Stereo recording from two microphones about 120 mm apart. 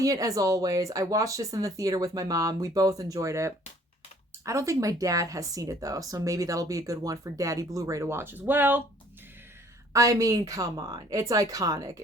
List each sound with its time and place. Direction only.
0.0 s speech: 30° right (ahead or behind)
9.9 s speech: 30° right (ahead or behind)